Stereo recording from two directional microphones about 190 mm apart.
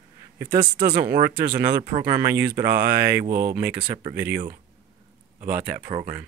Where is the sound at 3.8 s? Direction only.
30° right (ahead or behind).